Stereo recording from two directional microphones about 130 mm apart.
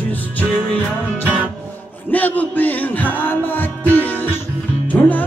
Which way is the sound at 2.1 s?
15° left (ahead or behind).